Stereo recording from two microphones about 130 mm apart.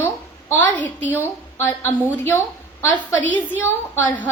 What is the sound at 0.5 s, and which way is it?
A woman's voice, 10° left (ahead or behind).